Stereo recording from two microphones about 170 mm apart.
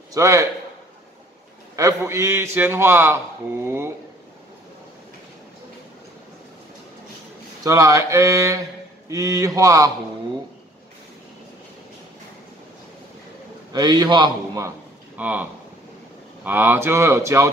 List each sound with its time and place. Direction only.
0.1 s mantra: 20° right (ahead or behind)
1.8 s a man's voice: 20° right (ahead or behind)
7.6 s mantra: 20° right (ahead or behind)
13.7 s mantra: 25° right (ahead or behind)
15.1 s speech: 10° right (ahead or behind)
16.4 s a man's voice: 10° right (ahead or behind)